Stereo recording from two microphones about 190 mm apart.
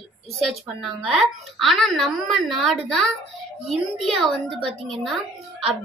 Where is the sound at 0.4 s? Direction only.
Centre (ahead or behind).